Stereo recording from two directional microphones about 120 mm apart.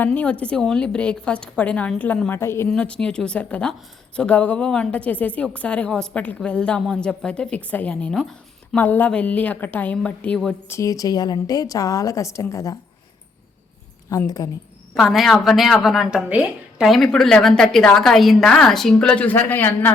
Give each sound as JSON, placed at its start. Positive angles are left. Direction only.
{"t": 0.0, "sound": "a woman's voice", "side_deg": 15}
{"t": 2.6, "sound": "a woman's voice", "side_deg": 10}
{"t": 8.8, "sound": "a woman's voice", "side_deg": 15}
{"t": 10.7, "sound": "a woman's voice", "side_deg": 25}
{"t": 14.1, "sound": "speech", "side_deg": 30}
{"t": 14.9, "sound": "a woman's voice", "side_deg": 0}